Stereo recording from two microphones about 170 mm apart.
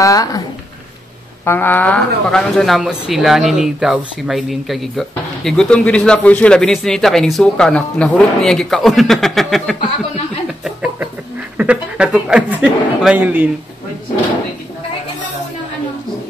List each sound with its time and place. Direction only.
0.0 s speech: 20° left (ahead or behind)
1.4 s speech: 10° left (ahead or behind)
10.6 s a sound: 5° right (ahead or behind)
11.5 s a man's voice: 5° right (ahead or behind)